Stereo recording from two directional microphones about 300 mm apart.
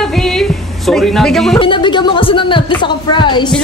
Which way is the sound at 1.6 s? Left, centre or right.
Centre.